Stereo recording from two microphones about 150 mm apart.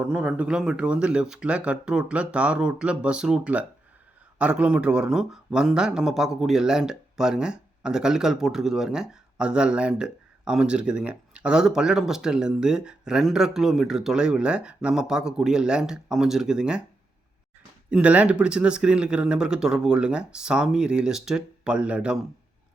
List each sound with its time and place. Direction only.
0.0 s speech: 10° right (ahead or behind)
17.9 s speech: 10° right (ahead or behind)